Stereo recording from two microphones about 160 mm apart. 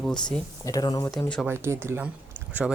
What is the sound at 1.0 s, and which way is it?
Speech, 10° left (ahead or behind).